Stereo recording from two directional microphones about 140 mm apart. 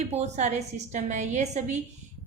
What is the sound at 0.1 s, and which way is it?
A woman's voice, 55° right (ahead or behind).